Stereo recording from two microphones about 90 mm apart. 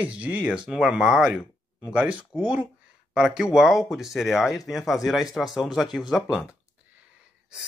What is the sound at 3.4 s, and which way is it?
Speech, 5° right (ahead or behind).